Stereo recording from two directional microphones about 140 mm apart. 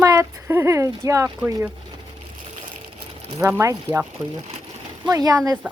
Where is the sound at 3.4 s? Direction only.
20° right (ahead or behind).